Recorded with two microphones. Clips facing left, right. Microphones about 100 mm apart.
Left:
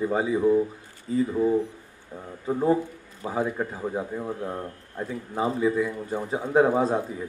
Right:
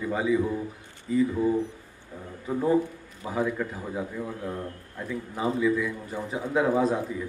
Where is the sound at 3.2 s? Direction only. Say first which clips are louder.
Left 1 dB; 30° left (ahead or behind).